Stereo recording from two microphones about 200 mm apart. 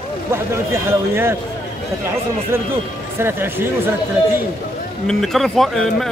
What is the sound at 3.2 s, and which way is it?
Speech, 10° right (ahead or behind).